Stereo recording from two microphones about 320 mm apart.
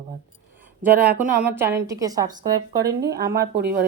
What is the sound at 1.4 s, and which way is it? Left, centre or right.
Speech, centre.